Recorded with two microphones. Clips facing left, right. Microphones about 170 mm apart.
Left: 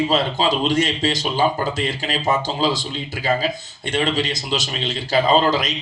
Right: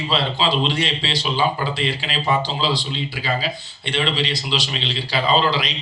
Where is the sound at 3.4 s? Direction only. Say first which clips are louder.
Left 3 dB; 45° left (ahead or behind).